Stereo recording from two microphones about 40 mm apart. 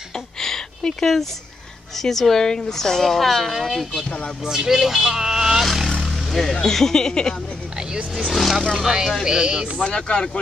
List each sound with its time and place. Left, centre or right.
0.4 s a sound: centre
2.0 s a woman's voice: centre
5.9 s speech: centre
8.3 s speech: centre
9.8 s speech: left